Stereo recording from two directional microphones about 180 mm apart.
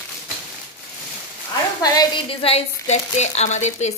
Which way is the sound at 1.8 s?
20° left (ahead or behind).